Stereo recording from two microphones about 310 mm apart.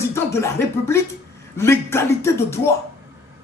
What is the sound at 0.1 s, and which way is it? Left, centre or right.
Speech, centre.